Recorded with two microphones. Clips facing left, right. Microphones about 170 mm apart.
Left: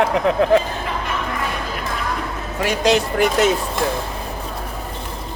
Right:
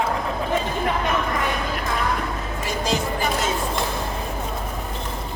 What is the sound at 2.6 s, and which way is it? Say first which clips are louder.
Speech: left 8 dB; 75° left (ahead or behind).